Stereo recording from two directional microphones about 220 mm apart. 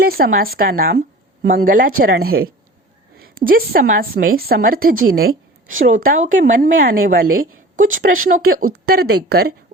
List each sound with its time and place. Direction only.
0.0 s a woman's voice: 40° right (ahead or behind)